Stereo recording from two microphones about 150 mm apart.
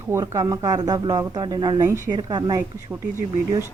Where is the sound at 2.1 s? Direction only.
30° right (ahead or behind).